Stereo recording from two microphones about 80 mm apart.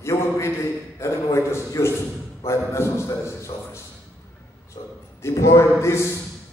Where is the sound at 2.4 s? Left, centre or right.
Left.